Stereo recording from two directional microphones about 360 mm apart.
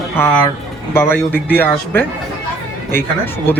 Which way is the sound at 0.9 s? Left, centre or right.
Centre.